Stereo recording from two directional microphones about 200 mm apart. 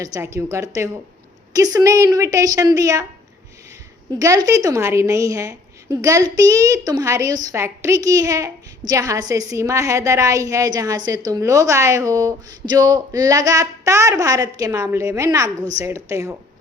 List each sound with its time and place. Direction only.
0.0 s a woman's voice: 15° right (ahead or behind)
4.1 s a woman's voice: 20° right (ahead or behind)